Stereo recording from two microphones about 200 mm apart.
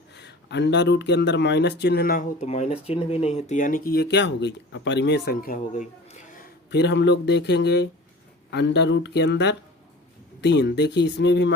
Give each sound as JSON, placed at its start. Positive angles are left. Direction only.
{"t": 0.1, "sound": "speech", "side_deg": 55}
{"t": 2.4, "sound": "speech", "side_deg": 30}
{"t": 6.7, "sound": "speech", "side_deg": 60}